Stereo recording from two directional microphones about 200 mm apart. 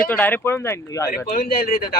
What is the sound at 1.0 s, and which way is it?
Speech, 45° left (ahead or behind).